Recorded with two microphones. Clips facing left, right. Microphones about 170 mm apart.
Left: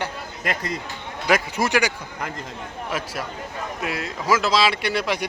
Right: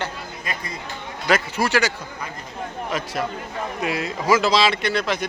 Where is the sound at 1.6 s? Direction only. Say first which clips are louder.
Even; 15° left (ahead or behind).